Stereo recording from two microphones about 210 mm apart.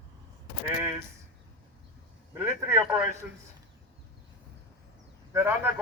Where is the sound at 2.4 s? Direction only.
10° right (ahead or behind).